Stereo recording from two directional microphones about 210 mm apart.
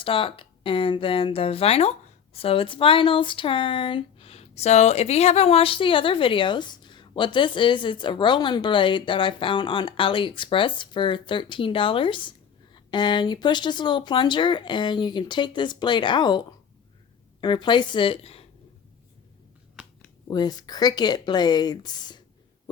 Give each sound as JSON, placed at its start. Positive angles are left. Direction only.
{"t": 0.0, "sound": "speech", "side_deg": 25}
{"t": 19.8, "sound": "a sound", "side_deg": -5}
{"t": 20.2, "sound": "speech", "side_deg": 20}